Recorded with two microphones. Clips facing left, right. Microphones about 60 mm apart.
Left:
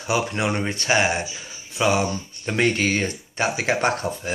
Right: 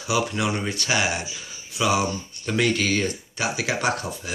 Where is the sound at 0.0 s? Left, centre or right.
Left.